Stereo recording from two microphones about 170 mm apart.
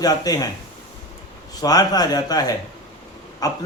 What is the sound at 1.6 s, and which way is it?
A man's voice, 20° left (ahead or behind).